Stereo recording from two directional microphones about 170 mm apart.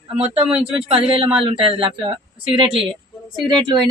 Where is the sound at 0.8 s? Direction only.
30° right (ahead or behind).